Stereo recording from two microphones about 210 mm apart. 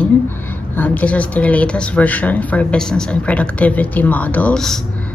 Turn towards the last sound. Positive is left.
turn(degrees=5)  # may be behind; listen again after turning